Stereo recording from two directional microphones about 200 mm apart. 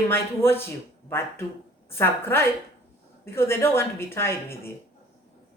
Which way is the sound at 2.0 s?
10° left (ahead or behind).